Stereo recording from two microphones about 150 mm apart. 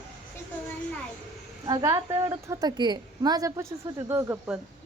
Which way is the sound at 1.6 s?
25° right (ahead or behind).